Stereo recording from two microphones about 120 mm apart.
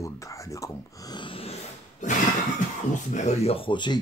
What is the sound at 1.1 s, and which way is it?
Speech, 45° left (ahead or behind).